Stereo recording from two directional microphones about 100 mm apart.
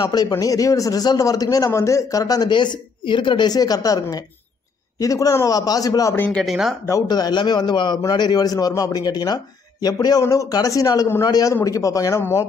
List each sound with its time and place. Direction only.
0.0 s a man's voice: 35° left (ahead or behind)
6.1 s speech: 15° left (ahead or behind)
6.4 s speech: centre (ahead or behind)
7.1 s a man's voice: 45° left (ahead or behind); by 12.4 s 25° left (ahead or behind)